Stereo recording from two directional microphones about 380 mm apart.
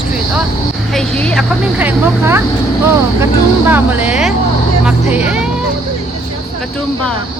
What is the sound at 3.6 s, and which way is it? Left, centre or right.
Speech, centre.